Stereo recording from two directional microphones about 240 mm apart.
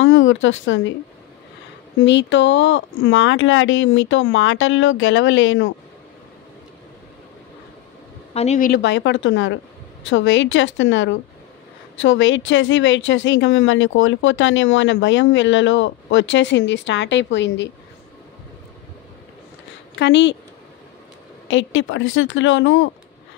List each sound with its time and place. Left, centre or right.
0.0 s speech: left
2.0 s speech: left
8.3 s speech: left
20.0 s speech: left
21.5 s speech: left